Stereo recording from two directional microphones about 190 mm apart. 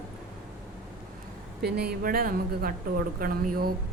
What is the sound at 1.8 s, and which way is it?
A woman's voice, 55° right (ahead or behind).